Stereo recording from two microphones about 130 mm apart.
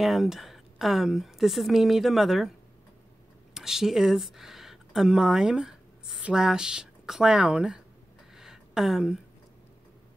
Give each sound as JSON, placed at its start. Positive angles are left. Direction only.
{"t": 0.0, "sound": "a woman's voice", "side_deg": 0}
{"t": 3.5, "sound": "speech", "side_deg": -5}
{"t": 8.4, "sound": "a sound", "side_deg": -5}